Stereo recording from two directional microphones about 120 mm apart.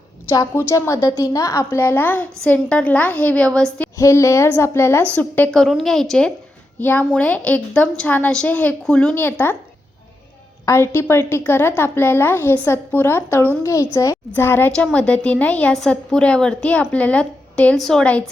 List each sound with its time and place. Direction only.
0.3 s a woman's voice: 20° left (ahead or behind)
3.9 s a woman's voice: 25° left (ahead or behind)
5.5 s a woman's voice: centre (ahead or behind)
6.7 s a woman's voice: 15° left (ahead or behind)
10.7 s a woman's voice: 20° left (ahead or behind)